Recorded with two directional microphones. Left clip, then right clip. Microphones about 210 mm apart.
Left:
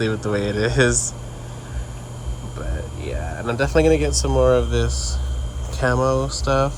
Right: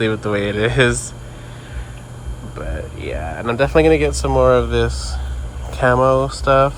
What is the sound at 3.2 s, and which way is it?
Speech, 5° left (ahead or behind).